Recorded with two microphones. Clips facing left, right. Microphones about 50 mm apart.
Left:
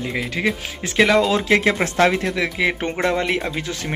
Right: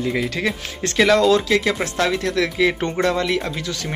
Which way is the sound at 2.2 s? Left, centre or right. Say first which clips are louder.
Right 2 dB; centre.